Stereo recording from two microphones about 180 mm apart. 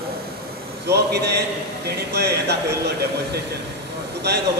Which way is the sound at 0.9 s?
65° right (ahead or behind).